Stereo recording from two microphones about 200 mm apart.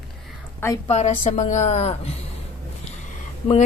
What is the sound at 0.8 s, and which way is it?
A woman's voice, 35° left (ahead or behind).